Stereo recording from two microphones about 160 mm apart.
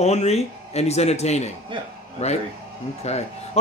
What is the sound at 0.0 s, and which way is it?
Speech, 45° left (ahead or behind).